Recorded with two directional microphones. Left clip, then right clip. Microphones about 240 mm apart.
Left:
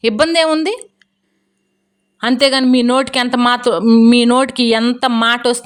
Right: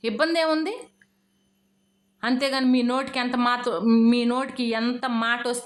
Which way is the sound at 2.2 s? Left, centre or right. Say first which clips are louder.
Left 11 dB; left.